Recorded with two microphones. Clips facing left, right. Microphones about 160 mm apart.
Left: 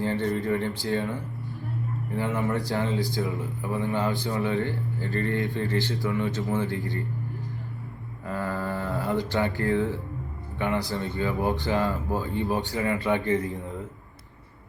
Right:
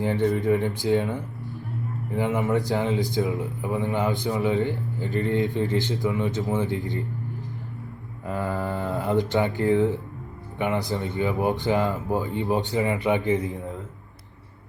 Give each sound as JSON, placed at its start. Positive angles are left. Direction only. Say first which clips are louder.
{"t": 0.0, "sound": "a man's voice", "louder": "right 4 dB", "side_deg": -15}
{"t": 8.3, "sound": "a man's voice", "louder": "right 2 dB", "side_deg": -20}